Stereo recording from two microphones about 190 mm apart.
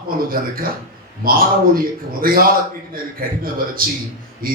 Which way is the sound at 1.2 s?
50° right (ahead or behind).